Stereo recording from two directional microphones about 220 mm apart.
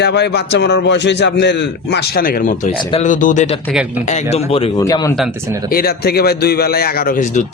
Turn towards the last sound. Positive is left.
turn(degrees=35)  # may be behind; listen again after turning